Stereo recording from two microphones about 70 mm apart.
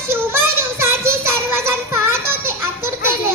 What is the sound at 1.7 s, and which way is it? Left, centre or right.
Music, right.